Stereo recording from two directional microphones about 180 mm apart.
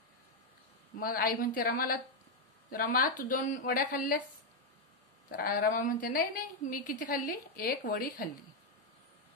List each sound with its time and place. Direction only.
0.9 s a woman's voice: 55° left (ahead or behind)
5.3 s a woman's voice: 55° left (ahead or behind)